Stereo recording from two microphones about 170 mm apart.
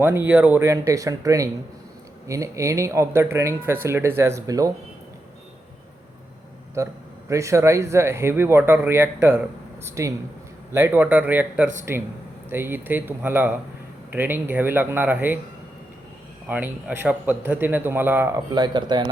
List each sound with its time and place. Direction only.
0.0 s speech: 10° right (ahead or behind)
6.8 s speech: 20° right (ahead or behind)
16.5 s speech: 10° right (ahead or behind)
18.5 s speech: 25° right (ahead or behind)